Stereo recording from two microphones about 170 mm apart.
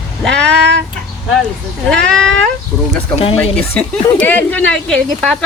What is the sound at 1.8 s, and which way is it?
Speech, 5° left (ahead or behind).